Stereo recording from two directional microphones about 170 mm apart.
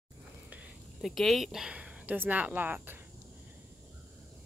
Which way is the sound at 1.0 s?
Centre (ahead or behind).